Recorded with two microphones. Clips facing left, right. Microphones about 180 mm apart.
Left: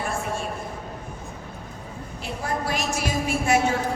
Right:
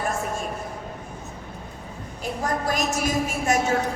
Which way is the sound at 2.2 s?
45° right (ahead or behind).